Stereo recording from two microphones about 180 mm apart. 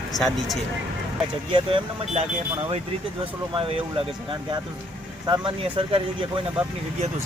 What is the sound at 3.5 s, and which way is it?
Speech, 30° right (ahead or behind).